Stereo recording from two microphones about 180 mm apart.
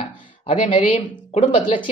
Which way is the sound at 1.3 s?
30° left (ahead or behind).